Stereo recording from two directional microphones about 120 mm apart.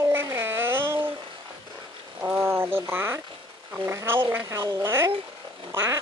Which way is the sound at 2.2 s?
20° right (ahead or behind).